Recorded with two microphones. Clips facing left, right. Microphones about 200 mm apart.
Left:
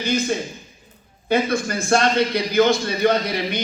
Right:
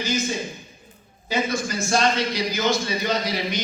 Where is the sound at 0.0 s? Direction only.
55° left (ahead or behind).